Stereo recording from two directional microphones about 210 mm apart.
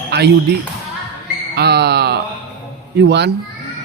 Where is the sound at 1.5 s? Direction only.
50° right (ahead or behind).